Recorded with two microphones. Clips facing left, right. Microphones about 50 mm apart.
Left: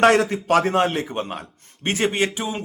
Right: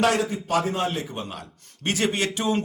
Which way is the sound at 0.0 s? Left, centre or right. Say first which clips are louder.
Left 6 dB; left.